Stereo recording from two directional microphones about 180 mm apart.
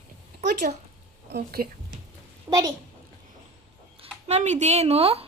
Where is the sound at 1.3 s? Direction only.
60° right (ahead or behind).